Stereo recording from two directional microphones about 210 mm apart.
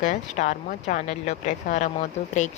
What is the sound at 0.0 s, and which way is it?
Speech, 35° left (ahead or behind).